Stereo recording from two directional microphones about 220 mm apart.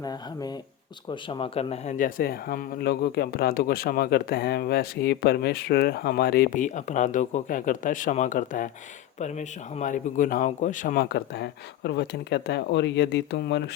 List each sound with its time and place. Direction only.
0.0 s speech: 20° left (ahead or behind); by 13.7 s 50° left (ahead or behind)